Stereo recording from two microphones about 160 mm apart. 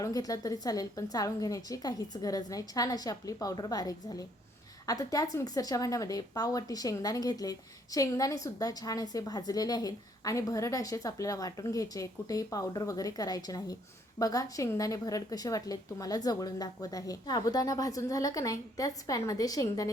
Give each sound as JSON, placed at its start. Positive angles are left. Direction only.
{"t": 0.0, "sound": "a woman's voice", "side_deg": 20}